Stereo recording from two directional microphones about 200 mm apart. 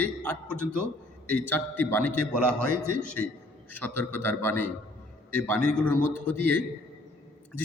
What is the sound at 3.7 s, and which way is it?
A man's voice, 10° left (ahead or behind).